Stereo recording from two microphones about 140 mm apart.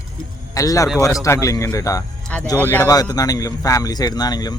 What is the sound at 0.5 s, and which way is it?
A man's voice, 25° left (ahead or behind).